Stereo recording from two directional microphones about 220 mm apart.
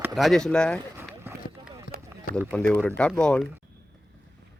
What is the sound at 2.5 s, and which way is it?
Speech, 5° left (ahead or behind).